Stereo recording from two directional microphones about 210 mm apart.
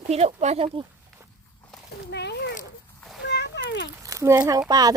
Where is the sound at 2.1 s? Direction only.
55° left (ahead or behind).